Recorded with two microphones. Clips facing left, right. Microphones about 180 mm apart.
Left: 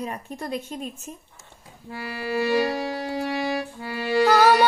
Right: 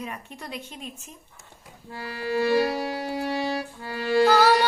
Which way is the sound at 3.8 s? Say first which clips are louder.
Right 2 dB; 15° left (ahead or behind).